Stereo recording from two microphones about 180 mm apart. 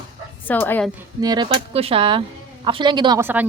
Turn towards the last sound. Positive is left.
turn(degrees=-25)  # may be behind; listen again after turning